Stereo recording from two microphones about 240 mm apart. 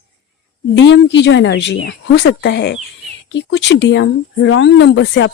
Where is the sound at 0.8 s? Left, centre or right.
Left.